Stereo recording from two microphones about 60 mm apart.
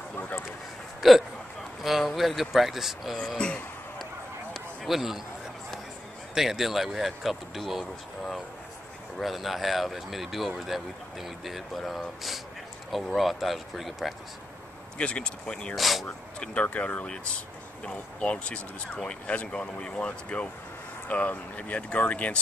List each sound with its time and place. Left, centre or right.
1.0 s speech: centre
3.3 s speech: centre
4.8 s speech: centre
6.3 s speech: centre
15.0 s speech: centre
15.7 s speech: centre
16.6 s speech: left